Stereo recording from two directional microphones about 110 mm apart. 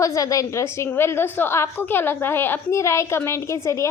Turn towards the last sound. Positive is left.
turn(degrees=25)  # may be behind; listen again after turning